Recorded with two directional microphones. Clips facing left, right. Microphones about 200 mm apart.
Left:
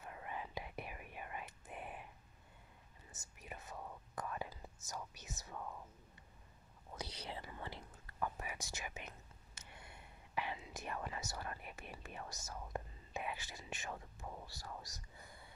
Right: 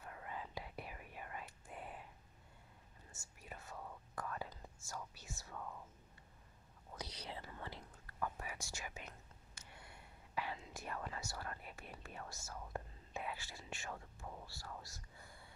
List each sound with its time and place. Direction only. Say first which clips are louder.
0.0 s whispering: left 2 dB; 20° left (ahead or behind)
3.1 s whispering: left 2 dB; 20° left (ahead or behind)
7.0 s whispering: left 2 dB; 25° left (ahead or behind)